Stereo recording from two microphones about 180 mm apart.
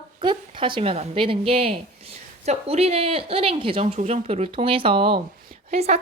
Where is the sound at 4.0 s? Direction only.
40° right (ahead or behind).